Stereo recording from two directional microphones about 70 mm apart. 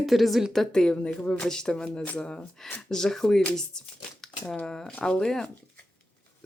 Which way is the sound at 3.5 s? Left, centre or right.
Centre.